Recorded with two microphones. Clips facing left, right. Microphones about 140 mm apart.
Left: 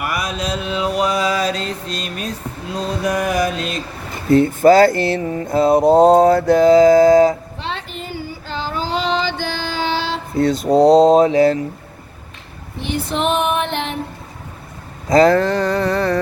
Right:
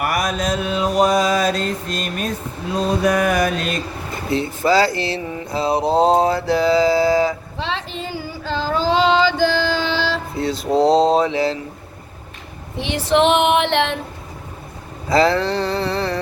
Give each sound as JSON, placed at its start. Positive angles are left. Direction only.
{"t": 0.0, "sound": "mantra", "side_deg": -50}
{"t": 4.3, "sound": "mantra", "side_deg": 50}
{"t": 7.6, "sound": "child singing", "side_deg": -90}
{"t": 9.6, "sound": "female singing", "side_deg": -90}
{"t": 10.3, "sound": "a sound", "side_deg": 50}
{"t": 10.6, "sound": "speech", "side_deg": 0}
{"t": 10.9, "sound": "mantra", "side_deg": 45}
{"t": 12.7, "sound": "a sound", "side_deg": -80}
{"t": 15.1, "sound": "mantra", "side_deg": 45}